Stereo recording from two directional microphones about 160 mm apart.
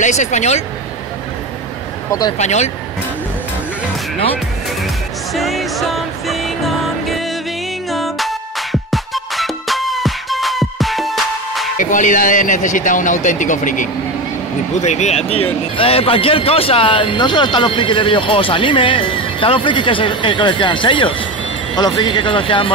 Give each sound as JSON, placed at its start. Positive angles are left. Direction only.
{"t": 0.0, "sound": "a man's voice", "side_deg": 50}
{"t": 2.3, "sound": "a man's voice", "side_deg": 45}
{"t": 5.3, "sound": "music", "side_deg": 0}
{"t": 11.8, "sound": "a man's voice", "side_deg": 55}